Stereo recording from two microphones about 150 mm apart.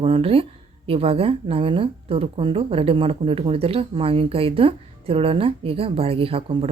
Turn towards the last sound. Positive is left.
turn(degrees=-40)  # may be behind; listen again after turning